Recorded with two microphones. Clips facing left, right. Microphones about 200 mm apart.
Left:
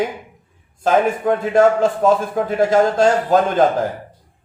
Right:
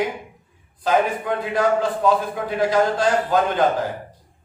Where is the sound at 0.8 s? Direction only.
45° left (ahead or behind).